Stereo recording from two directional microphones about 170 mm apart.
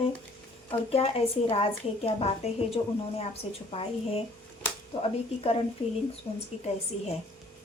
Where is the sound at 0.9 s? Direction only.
35° left (ahead or behind).